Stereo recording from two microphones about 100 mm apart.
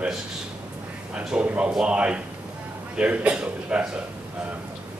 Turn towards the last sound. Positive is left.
turn(degrees=-10)  # may be behind; listen again after turning